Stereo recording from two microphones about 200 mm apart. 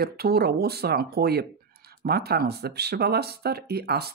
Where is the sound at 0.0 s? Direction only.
50° right (ahead or behind).